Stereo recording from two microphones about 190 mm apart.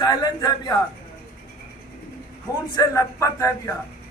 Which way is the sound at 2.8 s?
15° left (ahead or behind).